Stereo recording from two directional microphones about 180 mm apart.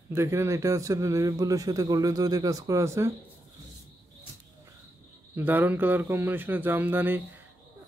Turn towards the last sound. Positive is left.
turn(degrees=-10)  # may be behind; listen again after turning